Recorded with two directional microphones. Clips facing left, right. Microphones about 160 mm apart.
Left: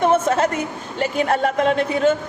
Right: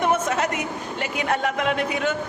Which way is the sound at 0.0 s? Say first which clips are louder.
Left 5 dB; 30° left (ahead or behind).